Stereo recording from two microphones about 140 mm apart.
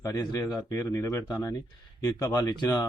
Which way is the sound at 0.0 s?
25° left (ahead or behind).